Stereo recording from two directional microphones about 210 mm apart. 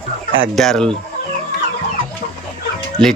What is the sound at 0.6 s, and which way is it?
Speech, 5° left (ahead or behind).